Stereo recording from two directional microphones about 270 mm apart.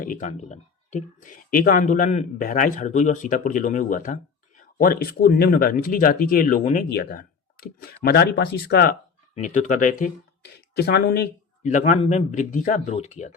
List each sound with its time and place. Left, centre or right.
0.0 s speech: left